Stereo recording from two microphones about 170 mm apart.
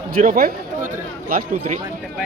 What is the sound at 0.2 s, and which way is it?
Speech, 55° right (ahead or behind).